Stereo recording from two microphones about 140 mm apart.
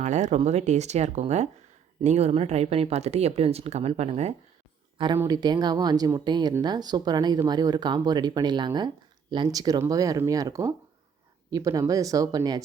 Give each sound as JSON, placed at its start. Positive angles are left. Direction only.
{"t": 0.0, "sound": "speech", "side_deg": -60}
{"t": 5.1, "sound": "speech", "side_deg": -20}
{"t": 5.4, "sound": "speech", "side_deg": -30}